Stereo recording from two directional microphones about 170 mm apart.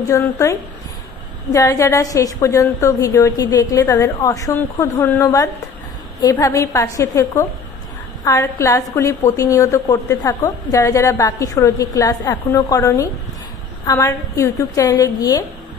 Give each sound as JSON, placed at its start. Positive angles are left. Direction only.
{"t": 0.1, "sound": "a woman's voice", "side_deg": 20}